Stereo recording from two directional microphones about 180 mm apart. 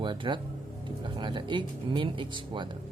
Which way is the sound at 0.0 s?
25° right (ahead or behind).